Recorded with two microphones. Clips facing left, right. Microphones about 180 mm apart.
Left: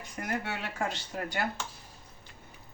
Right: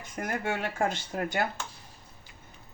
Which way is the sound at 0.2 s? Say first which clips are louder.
Right 4 dB; 45° right (ahead or behind).